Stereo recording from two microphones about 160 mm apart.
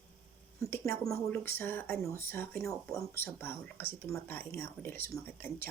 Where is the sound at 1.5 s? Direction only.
15° left (ahead or behind).